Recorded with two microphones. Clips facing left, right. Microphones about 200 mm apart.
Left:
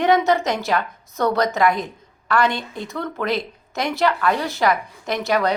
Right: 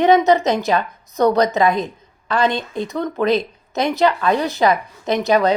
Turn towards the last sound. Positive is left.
turn(degrees=-20)  # may be behind; listen again after turning